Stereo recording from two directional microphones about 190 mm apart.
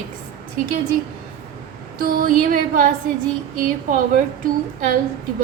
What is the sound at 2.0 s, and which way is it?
Music, 50° right (ahead or behind).